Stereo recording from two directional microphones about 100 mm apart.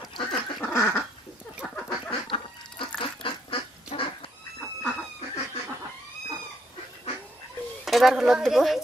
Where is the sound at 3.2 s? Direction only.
65° left (ahead or behind).